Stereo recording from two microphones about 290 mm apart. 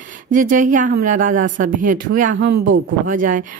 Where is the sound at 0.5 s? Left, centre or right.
Right.